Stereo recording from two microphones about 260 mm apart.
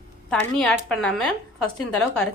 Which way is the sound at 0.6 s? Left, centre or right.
Centre.